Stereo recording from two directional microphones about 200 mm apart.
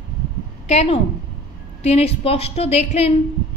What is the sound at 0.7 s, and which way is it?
A woman's voice, 30° left (ahead or behind).